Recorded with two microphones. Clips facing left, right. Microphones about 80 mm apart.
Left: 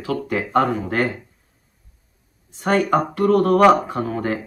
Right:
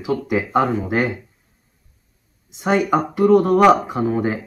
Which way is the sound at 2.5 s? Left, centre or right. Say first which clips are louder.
Even; centre.